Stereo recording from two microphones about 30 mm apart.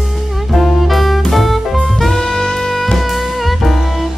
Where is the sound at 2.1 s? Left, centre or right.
Left.